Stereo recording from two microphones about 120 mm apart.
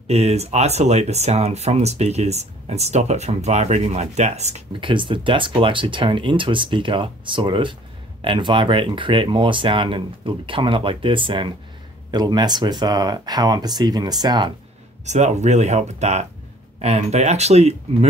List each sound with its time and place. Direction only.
0.1 s speech: 60° right (ahead or behind)
4.7 s speech: 45° right (ahead or behind)
15.0 s speech: 75° right (ahead or behind)